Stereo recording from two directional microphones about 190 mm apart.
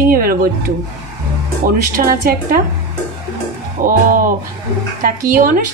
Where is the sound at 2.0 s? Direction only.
50° right (ahead or behind).